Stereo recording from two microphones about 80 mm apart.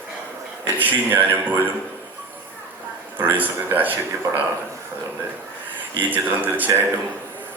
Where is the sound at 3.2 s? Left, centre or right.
Right.